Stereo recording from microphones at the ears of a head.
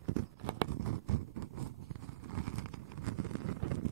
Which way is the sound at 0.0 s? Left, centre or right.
Right.